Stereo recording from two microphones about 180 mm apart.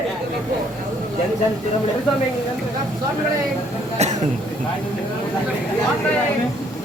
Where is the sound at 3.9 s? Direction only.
40° right (ahead or behind).